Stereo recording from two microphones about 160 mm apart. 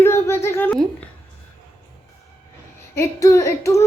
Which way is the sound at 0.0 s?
15° left (ahead or behind).